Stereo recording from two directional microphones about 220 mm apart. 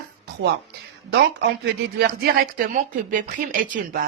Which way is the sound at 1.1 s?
50° right (ahead or behind).